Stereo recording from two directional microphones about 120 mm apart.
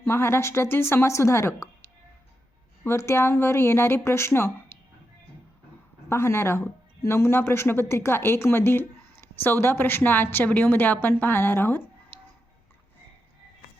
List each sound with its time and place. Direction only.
0.0 s speech: 20° left (ahead or behind)
2.8 s speech: 20° left (ahead or behind)
6.1 s speech: 20° left (ahead or behind)